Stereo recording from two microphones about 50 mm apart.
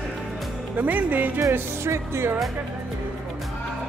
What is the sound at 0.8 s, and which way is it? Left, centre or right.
Speech, right.